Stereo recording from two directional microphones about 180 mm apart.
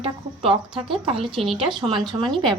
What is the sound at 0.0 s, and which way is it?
A woman's voice, 30° right (ahead or behind).